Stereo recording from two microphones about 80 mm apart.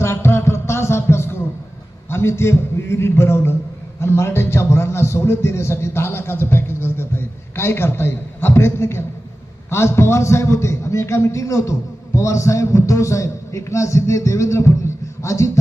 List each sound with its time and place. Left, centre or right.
0.0 s music: left
2.0 s a man's voice: left